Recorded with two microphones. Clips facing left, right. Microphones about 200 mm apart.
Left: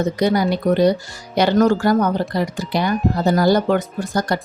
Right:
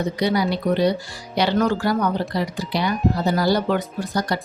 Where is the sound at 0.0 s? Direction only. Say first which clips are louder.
Left 3 dB; 45° left (ahead or behind).